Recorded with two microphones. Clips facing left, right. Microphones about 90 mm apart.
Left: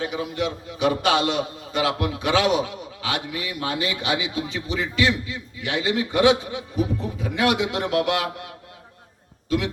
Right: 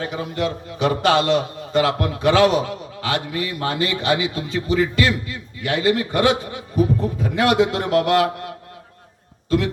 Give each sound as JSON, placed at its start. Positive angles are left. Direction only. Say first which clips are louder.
{"t": 0.0, "sound": "a man's voice", "louder": "right 2 dB", "side_deg": -40}